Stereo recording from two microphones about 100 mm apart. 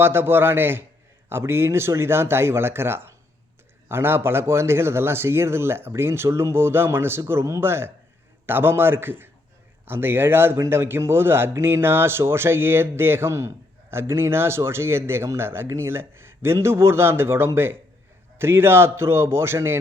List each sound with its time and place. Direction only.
0.0 s speech: 25° right (ahead or behind)